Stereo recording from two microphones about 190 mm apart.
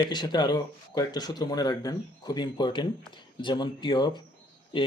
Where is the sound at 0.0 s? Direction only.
20° left (ahead or behind).